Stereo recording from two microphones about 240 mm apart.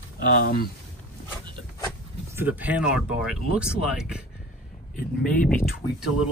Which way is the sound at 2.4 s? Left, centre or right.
Centre.